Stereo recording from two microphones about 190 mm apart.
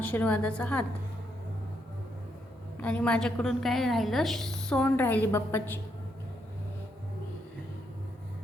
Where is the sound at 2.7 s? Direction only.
5° left (ahead or behind).